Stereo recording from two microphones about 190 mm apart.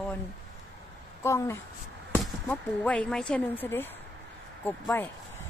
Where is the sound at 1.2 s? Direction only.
15° left (ahead or behind).